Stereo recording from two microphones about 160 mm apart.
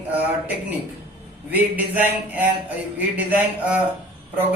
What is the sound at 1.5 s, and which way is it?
A man's voice, 10° right (ahead or behind).